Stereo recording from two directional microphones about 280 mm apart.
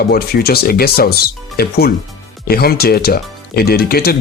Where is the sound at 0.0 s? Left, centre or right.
Left.